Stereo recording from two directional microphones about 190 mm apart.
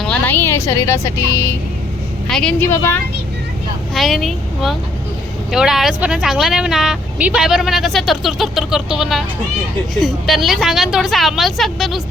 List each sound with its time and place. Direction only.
0.0 s music: 10° left (ahead or behind)
2.2 s a woman's voice: 5° left (ahead or behind)
3.9 s speech: centre (ahead or behind)